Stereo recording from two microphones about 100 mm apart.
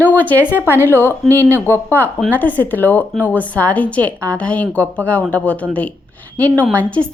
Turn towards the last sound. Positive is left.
turn(degrees=10)  # may be behind; listen again after turning